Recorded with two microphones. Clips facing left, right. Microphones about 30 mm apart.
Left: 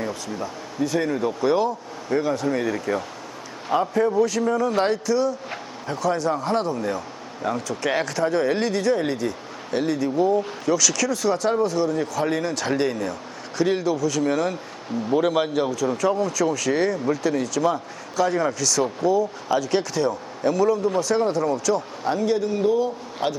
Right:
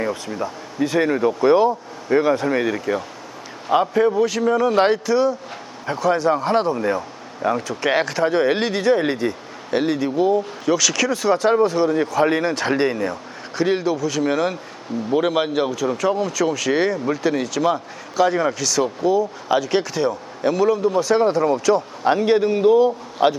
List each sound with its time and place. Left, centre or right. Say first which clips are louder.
0.3 s speech: right 4 dB; centre
0.9 s a man's voice: right 6 dB; right
2.7 s speech: right 2 dB; centre
3.8 s a man's voice: right 4 dB; right
4.2 s speech: right 3 dB; centre
13.9 s speech: right 1 dB; centre
21.2 s a man's voice: right 4 dB; right
23.2 s speech: right 8 dB; centre